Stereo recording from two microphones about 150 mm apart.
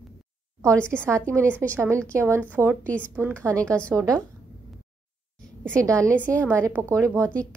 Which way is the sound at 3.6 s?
5° left (ahead or behind).